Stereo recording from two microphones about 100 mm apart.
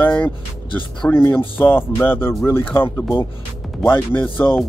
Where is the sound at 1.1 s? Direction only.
20° left (ahead or behind).